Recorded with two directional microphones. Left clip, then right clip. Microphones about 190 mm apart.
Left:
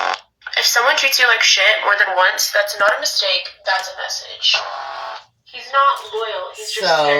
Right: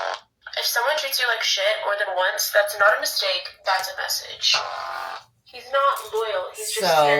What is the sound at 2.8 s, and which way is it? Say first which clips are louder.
Speech: left 3 dB; 10° left (ahead or behind).